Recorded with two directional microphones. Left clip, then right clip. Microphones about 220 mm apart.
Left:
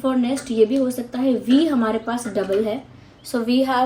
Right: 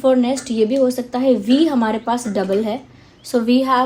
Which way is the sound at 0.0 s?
40° right (ahead or behind).